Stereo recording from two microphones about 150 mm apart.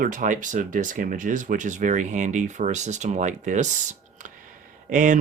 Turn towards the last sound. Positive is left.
turn(degrees=-55)  # may be behind; listen again after turning